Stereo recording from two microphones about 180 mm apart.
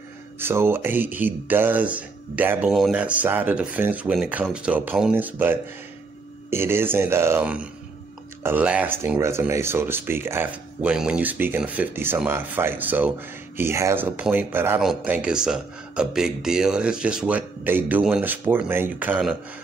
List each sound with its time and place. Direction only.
0.4 s speech: 15° right (ahead or behind)